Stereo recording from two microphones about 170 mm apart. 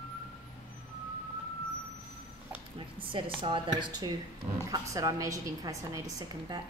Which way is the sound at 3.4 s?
25° right (ahead or behind).